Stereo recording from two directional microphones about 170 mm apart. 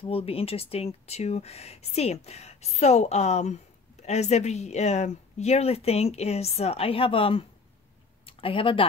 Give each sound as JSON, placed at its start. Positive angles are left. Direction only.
{"t": 0.0, "sound": "speech", "side_deg": 35}